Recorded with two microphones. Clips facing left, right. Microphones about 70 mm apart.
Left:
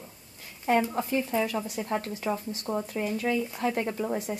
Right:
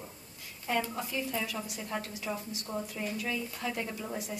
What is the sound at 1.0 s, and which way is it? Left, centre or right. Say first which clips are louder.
Speech: left 7 dB; left.